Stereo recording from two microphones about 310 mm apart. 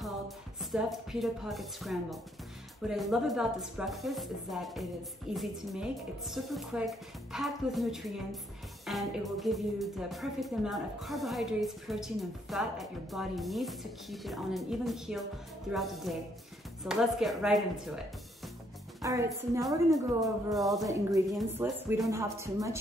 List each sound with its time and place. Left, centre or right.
0.6 s speech: centre
20.8 s speech: centre